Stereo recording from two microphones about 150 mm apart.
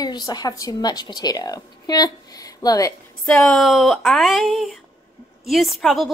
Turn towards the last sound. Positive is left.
turn(degrees=0)  # may be behind; listen again after turning